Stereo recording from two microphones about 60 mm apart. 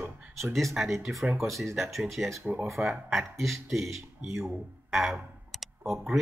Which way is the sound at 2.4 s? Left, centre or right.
Right.